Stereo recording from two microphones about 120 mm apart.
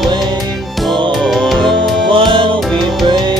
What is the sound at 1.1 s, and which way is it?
Music, centre (ahead or behind).